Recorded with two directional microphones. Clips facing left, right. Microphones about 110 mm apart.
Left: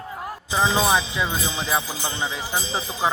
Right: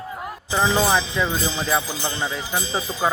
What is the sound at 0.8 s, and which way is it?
Speech, 5° left (ahead or behind).